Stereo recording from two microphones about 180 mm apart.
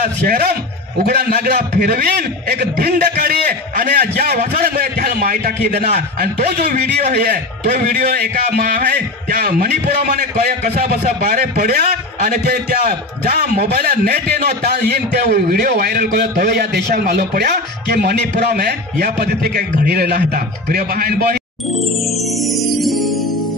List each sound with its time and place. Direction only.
0.0 s a man's voice: 60° right (ahead or behind)
22.4 s music: centre (ahead or behind)